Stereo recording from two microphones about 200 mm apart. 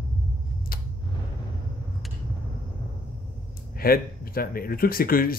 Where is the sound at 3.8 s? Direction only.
45° left (ahead or behind).